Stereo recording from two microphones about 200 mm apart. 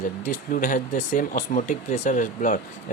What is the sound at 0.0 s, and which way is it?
Speech, 40° left (ahead or behind).